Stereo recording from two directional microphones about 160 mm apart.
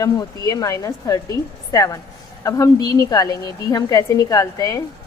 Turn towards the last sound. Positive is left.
turn(degrees=25)  # may be behind; listen again after turning